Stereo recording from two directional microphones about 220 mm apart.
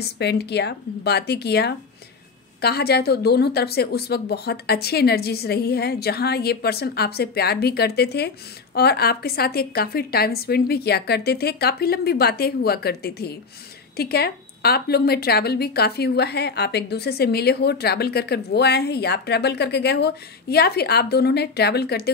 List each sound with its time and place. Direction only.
0.0 s speech: 50° left (ahead or behind)